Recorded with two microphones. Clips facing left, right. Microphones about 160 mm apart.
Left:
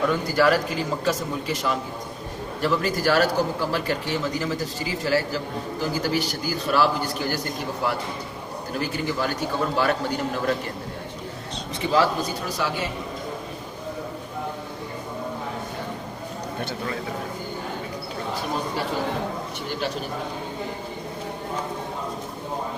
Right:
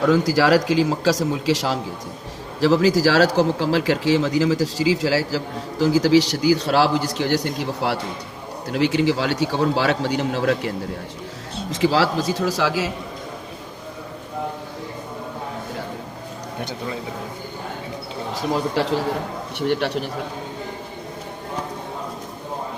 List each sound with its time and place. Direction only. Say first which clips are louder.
0.0 s a man's voice: right 4 dB; 90° right
11.7 s a man's voice: right 3 dB; 90° right
16.6 s a man's voice: right 2 dB; 15° right (ahead or behind)
18.8 s a man's voice: right 6 dB; 90° right
19.5 s a man's voice: right 11 dB; 65° right (ahead or behind)